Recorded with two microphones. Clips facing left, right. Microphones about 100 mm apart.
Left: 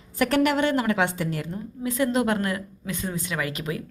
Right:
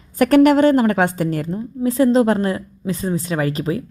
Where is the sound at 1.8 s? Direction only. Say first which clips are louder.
Right 9 dB; 35° right (ahead or behind).